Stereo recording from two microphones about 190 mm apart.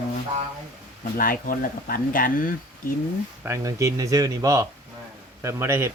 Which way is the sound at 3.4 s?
15° right (ahead or behind).